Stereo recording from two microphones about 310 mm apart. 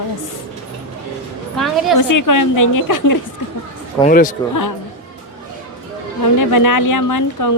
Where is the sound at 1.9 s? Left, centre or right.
Left.